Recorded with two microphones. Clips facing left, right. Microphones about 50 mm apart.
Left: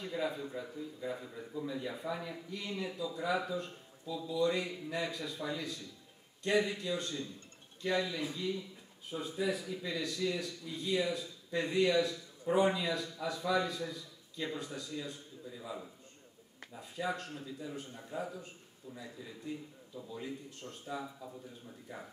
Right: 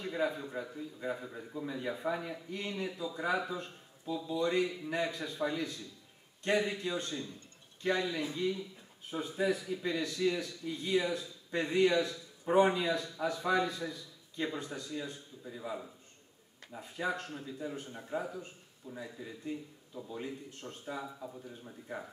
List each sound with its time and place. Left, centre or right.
0.0 s a man's voice: right
1.8 s a man's voice: right
4.1 s a man's voice: right
17.0 s a man's voice: right
20.1 s speech: right